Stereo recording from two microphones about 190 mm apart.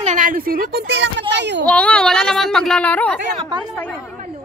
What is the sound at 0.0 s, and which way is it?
A child's voice, 40° right (ahead or behind).